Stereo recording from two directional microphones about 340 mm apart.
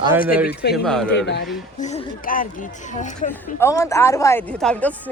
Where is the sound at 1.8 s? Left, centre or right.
Left.